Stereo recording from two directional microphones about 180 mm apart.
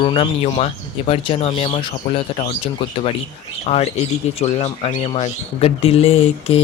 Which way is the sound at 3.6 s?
35° left (ahead or behind).